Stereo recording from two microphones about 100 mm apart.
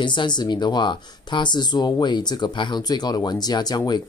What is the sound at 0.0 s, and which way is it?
Speech, 50° left (ahead or behind).